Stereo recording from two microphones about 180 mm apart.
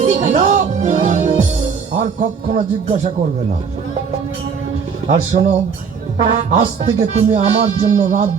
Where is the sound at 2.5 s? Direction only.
40° right (ahead or behind).